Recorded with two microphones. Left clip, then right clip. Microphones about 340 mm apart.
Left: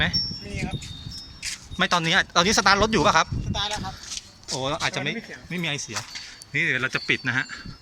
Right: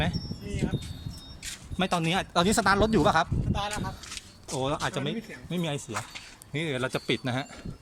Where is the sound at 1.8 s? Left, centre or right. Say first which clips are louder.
Left 7 dB; centre.